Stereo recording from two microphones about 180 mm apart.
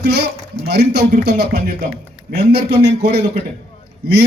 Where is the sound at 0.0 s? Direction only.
65° right (ahead or behind).